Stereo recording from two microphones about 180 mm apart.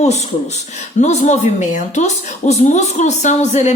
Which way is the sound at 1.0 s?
40° left (ahead or behind).